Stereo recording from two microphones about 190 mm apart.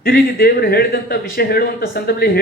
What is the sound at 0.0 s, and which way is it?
A man's voice, 50° left (ahead or behind).